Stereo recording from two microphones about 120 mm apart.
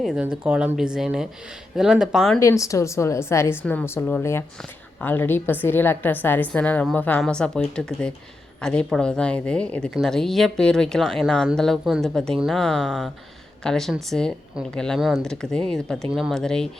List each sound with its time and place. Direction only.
0.0 s speech: 5° right (ahead or behind)
2.4 s a woman's voice: 25° left (ahead or behind); by 16.6 s 5° left (ahead or behind)